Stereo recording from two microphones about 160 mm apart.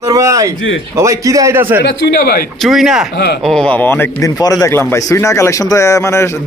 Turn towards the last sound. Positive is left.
turn(degrees=20)  # may be behind; listen again after turning